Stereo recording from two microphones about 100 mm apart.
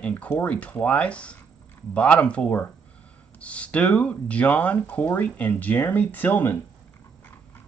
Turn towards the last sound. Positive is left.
turn(degrees=20)  # may be behind; listen again after turning